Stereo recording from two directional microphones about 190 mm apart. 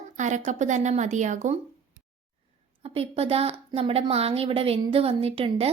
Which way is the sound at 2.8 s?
30° right (ahead or behind).